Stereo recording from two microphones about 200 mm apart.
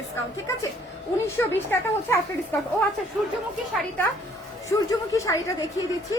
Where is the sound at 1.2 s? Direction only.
10° left (ahead or behind).